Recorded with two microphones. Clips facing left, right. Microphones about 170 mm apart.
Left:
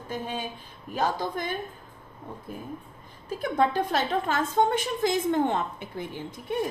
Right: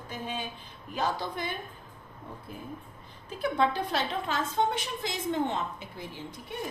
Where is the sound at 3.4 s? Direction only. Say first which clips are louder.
Left 3 dB; 45° left (ahead or behind).